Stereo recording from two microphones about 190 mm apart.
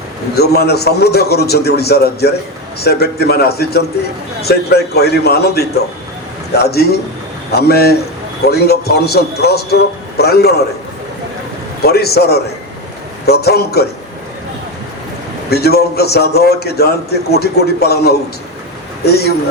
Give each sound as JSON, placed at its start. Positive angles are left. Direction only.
{"t": 0.3, "sound": "a man's voice", "side_deg": 55}
{"t": 11.8, "sound": "a man's voice", "side_deg": 55}
{"t": 15.4, "sound": "a man's voice", "side_deg": 55}